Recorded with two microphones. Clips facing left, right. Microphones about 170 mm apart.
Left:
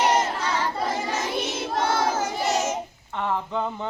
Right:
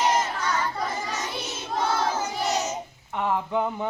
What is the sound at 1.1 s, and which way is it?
Child singing, 55° left (ahead or behind).